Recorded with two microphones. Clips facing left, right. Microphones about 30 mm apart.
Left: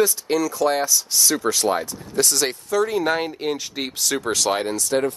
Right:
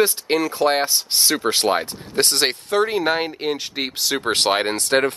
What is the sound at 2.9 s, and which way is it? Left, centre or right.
Speech, right.